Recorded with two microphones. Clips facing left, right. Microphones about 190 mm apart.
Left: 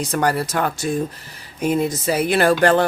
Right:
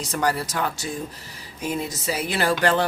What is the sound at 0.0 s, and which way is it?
Speech, 55° left (ahead or behind).